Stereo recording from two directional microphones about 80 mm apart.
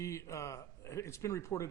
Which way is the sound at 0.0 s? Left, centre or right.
Left.